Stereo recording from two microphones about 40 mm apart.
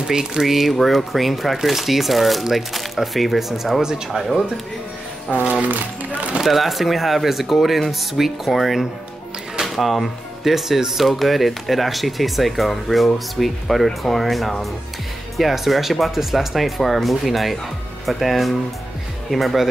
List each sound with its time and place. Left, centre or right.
0.1 s speech: centre
5.4 s speech: right
6.4 s speech: centre